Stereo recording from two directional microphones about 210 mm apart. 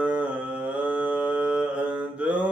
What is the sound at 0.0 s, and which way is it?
Mantra, 5° right (ahead or behind).